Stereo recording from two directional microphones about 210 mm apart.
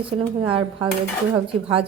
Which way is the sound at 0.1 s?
25° right (ahead or behind).